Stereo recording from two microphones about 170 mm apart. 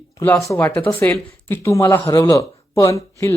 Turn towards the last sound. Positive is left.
turn(degrees=15)  # may be behind; listen again after turning